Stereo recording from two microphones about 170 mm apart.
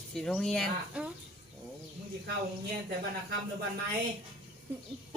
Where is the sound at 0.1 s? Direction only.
5° left (ahead or behind).